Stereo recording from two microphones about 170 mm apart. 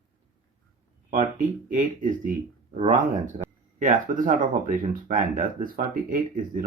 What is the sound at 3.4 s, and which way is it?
Speech, 50° right (ahead or behind).